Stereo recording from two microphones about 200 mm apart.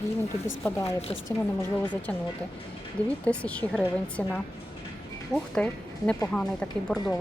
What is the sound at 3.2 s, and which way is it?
A woman's voice, 5° left (ahead or behind).